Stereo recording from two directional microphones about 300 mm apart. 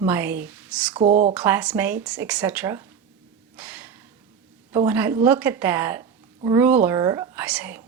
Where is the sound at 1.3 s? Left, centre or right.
Centre.